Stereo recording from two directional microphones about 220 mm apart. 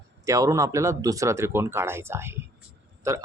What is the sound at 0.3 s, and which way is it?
Speech, 15° right (ahead or behind).